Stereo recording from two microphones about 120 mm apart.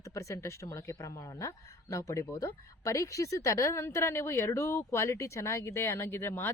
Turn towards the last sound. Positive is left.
turn(degrees=20)  # may be behind; listen again after turning